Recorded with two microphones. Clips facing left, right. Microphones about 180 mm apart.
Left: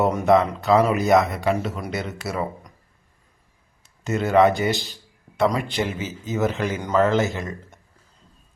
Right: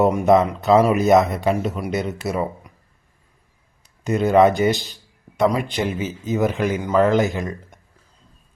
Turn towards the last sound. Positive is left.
turn(degrees=-15)  # may be behind; listen again after turning